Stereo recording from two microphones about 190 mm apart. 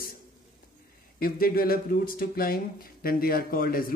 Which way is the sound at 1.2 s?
50° left (ahead or behind).